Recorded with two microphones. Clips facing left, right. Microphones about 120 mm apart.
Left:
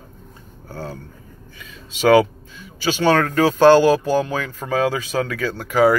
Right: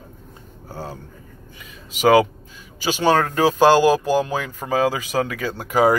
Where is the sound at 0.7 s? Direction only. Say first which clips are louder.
Left 1 dB; 10° right (ahead or behind).